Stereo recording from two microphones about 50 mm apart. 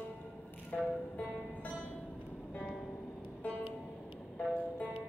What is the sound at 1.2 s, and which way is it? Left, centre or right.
Music, left.